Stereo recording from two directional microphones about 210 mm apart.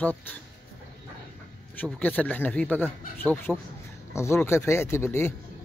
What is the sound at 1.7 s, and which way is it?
Speech, 5° left (ahead or behind).